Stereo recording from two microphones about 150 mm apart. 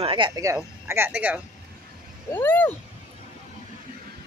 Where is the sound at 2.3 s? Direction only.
15° left (ahead or behind).